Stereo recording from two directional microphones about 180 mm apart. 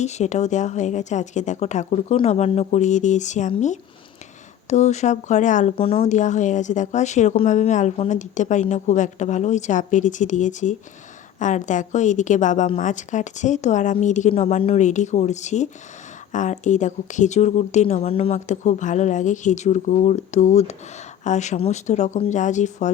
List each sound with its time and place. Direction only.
0.0 s speech: 40° left (ahead or behind)
5.7 s speech: 30° left (ahead or behind)